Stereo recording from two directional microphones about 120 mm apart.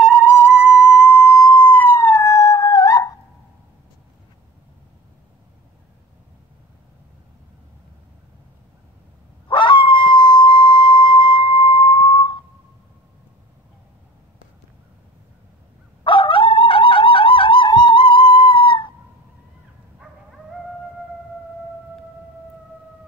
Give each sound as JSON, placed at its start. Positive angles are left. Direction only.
{"t": 0.4, "sound": "music", "side_deg": -15}
{"t": 1.4, "sound": "police car", "side_deg": 10}
{"t": 2.0, "sound": "a sound", "side_deg": 25}
{"t": 9.5, "sound": "howl", "side_deg": 45}
{"t": 16.0, "sound": "dog", "side_deg": 45}